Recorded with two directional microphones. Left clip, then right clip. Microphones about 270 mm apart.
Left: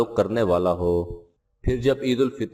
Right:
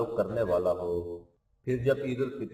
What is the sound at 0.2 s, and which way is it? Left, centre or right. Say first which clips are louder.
A man's voice: left 6 dB; left.